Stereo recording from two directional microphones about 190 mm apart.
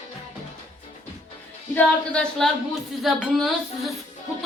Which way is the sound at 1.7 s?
5° left (ahead or behind).